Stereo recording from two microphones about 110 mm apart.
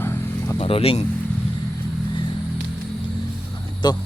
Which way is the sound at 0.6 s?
60° left (ahead or behind).